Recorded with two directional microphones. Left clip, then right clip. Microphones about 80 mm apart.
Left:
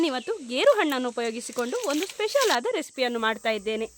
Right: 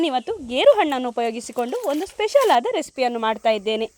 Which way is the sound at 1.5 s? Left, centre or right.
Centre.